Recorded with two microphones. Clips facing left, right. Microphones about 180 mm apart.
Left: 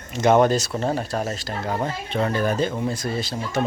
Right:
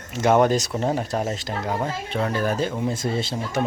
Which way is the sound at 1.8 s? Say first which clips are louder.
Left 1 dB; 5° right (ahead or behind).